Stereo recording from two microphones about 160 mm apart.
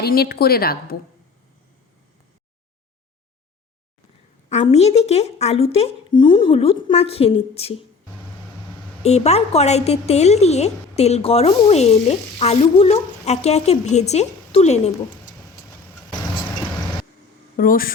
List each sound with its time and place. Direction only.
0.0 s a woman's voice: 80° left
4.4 s a woman's voice: 45° left (ahead or behind)
9.0 s a woman's voice: 40° left (ahead or behind)
17.6 s speech: 60° left (ahead or behind)